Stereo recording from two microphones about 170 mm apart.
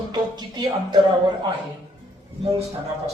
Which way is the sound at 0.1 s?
25° right (ahead or behind).